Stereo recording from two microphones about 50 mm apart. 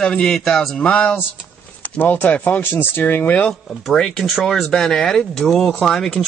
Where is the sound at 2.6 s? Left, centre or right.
Left.